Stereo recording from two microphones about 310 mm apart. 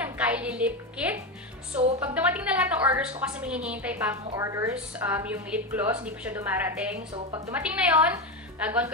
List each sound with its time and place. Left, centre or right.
0.0 s a woman's voice: centre